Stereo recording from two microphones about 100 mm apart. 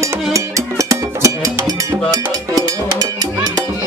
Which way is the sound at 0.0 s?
35° right (ahead or behind).